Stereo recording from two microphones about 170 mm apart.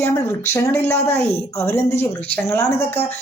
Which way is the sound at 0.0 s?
15° left (ahead or behind).